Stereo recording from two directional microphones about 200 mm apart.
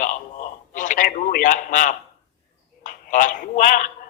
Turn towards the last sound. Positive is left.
turn(degrees=40)  # may be behind; listen again after turning